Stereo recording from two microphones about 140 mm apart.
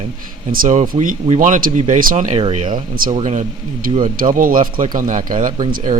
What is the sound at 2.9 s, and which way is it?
Speech, 90° right.